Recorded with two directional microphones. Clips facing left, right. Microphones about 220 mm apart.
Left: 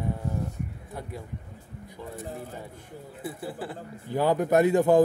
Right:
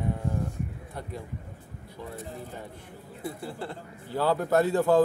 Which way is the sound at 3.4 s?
5° left (ahead or behind).